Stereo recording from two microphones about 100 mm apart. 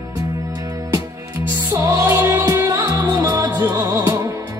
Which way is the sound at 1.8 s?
35° right (ahead or behind).